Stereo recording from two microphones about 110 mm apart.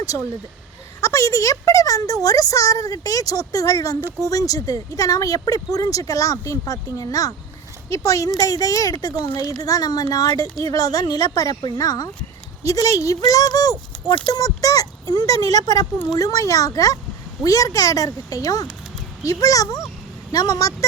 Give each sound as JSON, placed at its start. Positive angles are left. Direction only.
{"t": 1.0, "sound": "a woman's voice", "side_deg": 30}
{"t": 14.3, "sound": "a sound", "side_deg": 35}
{"t": 15.5, "sound": "a woman's voice", "side_deg": 35}